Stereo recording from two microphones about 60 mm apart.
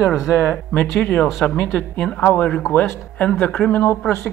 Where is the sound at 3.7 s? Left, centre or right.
Left.